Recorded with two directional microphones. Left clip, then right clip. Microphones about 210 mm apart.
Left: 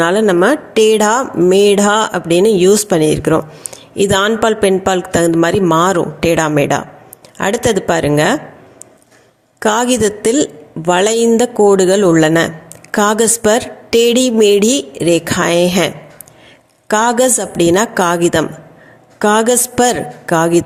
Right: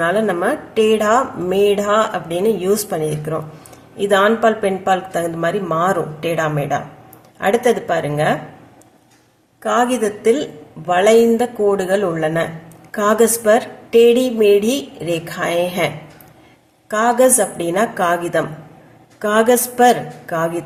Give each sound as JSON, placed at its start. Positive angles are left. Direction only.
{"t": 0.0, "sound": "a woman's voice", "side_deg": 40}
{"t": 9.6, "sound": "a woman's voice", "side_deg": 45}
{"t": 16.9, "sound": "a woman's voice", "side_deg": 40}